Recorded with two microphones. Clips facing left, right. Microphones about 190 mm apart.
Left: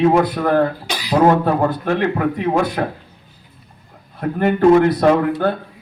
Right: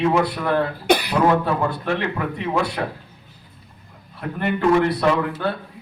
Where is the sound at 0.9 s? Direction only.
60° right (ahead or behind).